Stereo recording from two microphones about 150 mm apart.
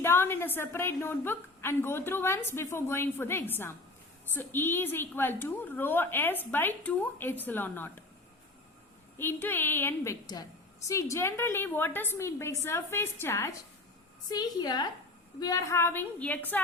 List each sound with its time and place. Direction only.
0.0 s a woman's voice: 15° left (ahead or behind)
9.1 s a woman's voice: 15° left (ahead or behind)
14.3 s a woman's voice: 25° left (ahead or behind); by 16.6 s 10° left (ahead or behind)